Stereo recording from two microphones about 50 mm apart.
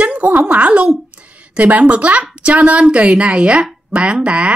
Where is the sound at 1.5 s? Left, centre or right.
Right.